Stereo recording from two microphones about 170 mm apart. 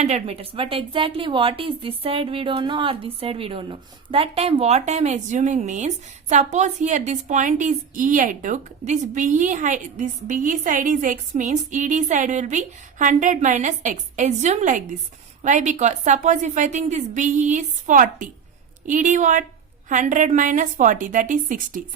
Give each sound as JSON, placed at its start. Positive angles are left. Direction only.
{"t": 0.0, "sound": "a woman's voice", "side_deg": -40}